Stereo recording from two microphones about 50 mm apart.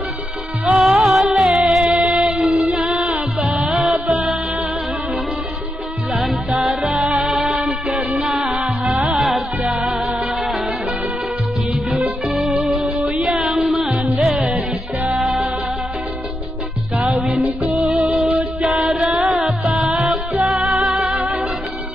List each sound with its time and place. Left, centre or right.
0.7 s music: centre
6.7 s music: centre
7.0 s music: right
7.2 s music: centre
12.3 s music: centre
13.2 s a sound: centre
14.2 s music: centre
17.1 s music: centre
19.3 s music: centre